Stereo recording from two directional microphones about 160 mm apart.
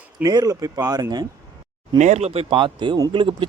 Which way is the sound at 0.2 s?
25° right (ahead or behind).